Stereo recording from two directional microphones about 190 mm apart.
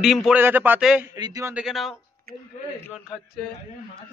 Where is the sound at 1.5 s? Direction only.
5° right (ahead or behind).